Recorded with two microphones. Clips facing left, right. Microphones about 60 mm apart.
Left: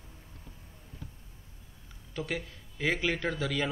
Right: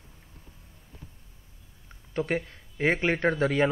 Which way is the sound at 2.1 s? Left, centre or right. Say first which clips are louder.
Right 7 dB; right.